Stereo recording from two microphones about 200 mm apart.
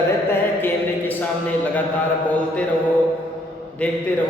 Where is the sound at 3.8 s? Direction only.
5° left (ahead or behind).